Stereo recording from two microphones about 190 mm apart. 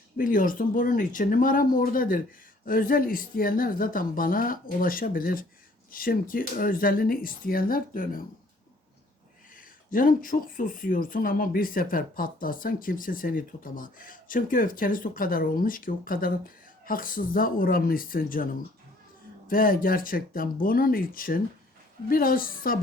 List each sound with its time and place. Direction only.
0.2 s speech: 45° left (ahead or behind)
9.6 s speech: 45° left (ahead or behind)
19.5 s speech: 50° left (ahead or behind)